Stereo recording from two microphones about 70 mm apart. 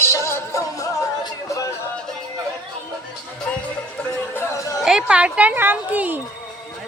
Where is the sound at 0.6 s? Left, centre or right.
Left.